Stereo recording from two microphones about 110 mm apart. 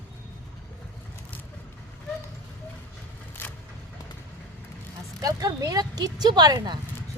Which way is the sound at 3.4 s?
20° left (ahead or behind).